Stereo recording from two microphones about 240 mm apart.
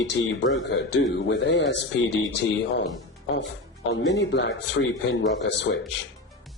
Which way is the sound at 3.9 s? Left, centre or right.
Left.